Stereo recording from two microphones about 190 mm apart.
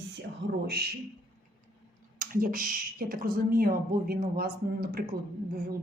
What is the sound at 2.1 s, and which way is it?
Speech, 45° right (ahead or behind).